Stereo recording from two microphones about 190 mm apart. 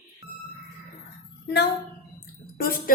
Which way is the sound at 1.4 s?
60° left (ahead or behind).